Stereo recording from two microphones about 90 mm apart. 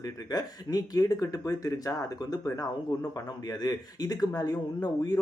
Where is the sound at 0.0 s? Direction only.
45° left (ahead or behind).